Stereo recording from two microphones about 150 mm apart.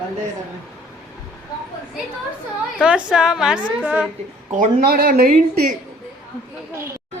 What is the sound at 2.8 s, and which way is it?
A woman's voice, 5° right (ahead or behind).